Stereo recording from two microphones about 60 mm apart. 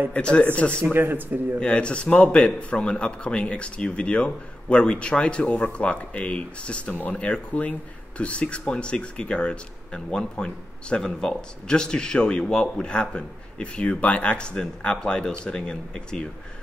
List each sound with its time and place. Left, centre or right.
0.1 s a man's voice: centre
0.9 s speech: right
1.6 s a man's voice: centre